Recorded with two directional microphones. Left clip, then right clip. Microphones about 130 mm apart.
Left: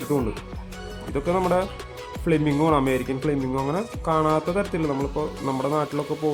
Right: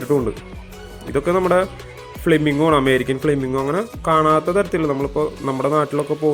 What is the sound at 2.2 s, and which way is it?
A man's voice, 10° right (ahead or behind).